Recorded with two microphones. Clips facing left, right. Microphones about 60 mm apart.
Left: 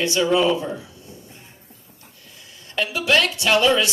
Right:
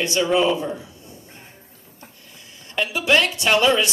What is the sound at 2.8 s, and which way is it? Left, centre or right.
A man's voice, right.